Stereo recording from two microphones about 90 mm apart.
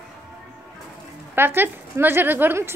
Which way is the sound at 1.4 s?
25° right (ahead or behind).